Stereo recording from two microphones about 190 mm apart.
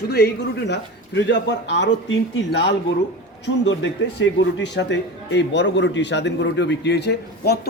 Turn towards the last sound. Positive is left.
turn(degrees=60)  # may be behind; listen again after turning